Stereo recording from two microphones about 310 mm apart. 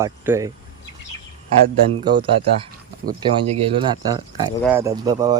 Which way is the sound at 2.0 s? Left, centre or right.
Centre.